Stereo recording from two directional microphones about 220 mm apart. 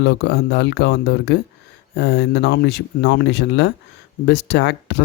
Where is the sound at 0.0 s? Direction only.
50° left (ahead or behind).